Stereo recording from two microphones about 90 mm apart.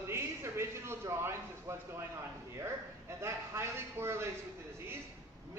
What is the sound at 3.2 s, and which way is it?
A man's voice, 30° right (ahead or behind).